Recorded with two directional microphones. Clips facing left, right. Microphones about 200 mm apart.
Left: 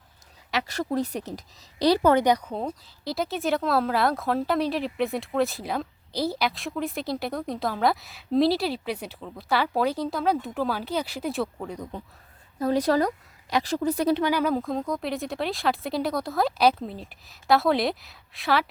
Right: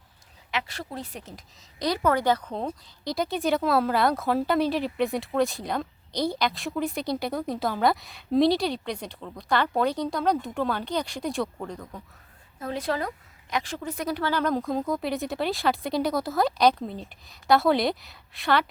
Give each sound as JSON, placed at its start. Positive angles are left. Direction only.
{"t": 0.5, "sound": "a woman's voice", "side_deg": 45}
{"t": 2.2, "sound": "speech", "side_deg": 10}
{"t": 11.8, "sound": "a man's voice", "side_deg": 25}
{"t": 12.5, "sound": "a woman's voice", "side_deg": 40}
{"t": 14.2, "sound": "speech", "side_deg": 15}